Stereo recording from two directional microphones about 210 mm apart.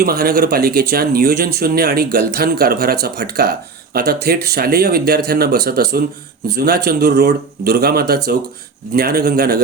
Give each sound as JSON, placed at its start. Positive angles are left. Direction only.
{"t": 0.0, "sound": "speech", "side_deg": -45}